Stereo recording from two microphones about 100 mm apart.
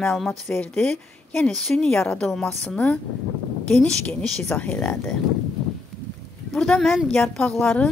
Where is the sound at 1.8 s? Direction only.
15° left (ahead or behind).